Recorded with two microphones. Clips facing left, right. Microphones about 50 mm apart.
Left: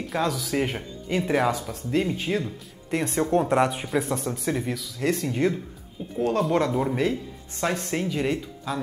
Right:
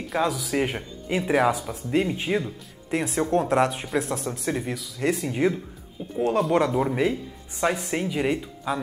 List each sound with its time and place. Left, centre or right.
0.0 s speech: centre